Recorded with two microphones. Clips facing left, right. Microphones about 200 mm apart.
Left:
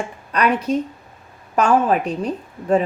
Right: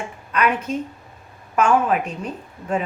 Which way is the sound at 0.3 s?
35° left (ahead or behind).